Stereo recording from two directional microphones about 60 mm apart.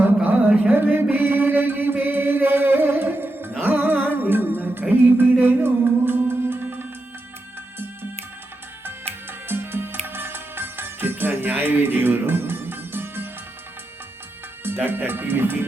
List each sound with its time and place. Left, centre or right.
0.3 s music: right
1.1 s chant: right
3.6 s music: right
9.5 s music: right
14.6 s music: right